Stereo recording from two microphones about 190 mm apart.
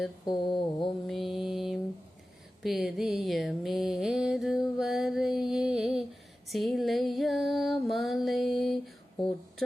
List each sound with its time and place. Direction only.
0.3 s mantra: 25° left (ahead or behind)
1.0 s mantra: centre (ahead or behind)
2.6 s music: centre (ahead or behind)